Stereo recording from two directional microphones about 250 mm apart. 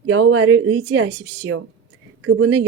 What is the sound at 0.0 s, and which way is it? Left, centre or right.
Speech, right.